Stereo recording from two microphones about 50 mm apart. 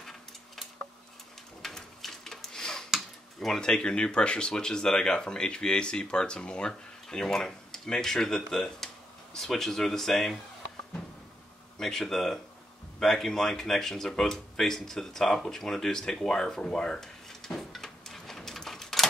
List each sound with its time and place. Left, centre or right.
1.6 s a sound: centre
3.3 s speech: centre
11.8 s speech: centre